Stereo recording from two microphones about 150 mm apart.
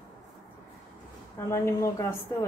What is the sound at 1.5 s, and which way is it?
Speech, 20° left (ahead or behind).